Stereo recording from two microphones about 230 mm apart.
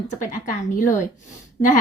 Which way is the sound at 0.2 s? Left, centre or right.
Left.